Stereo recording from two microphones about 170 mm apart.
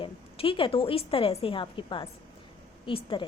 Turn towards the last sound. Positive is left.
turn(degrees=30)  # may be behind; listen again after turning